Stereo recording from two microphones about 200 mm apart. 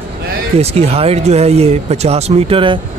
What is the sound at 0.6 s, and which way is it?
Speech, 30° right (ahead or behind).